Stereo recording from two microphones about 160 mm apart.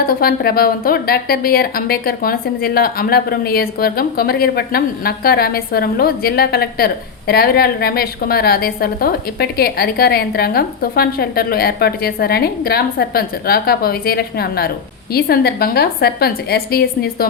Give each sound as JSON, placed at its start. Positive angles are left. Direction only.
{"t": 0.0, "sound": "a woman's voice", "side_deg": 65}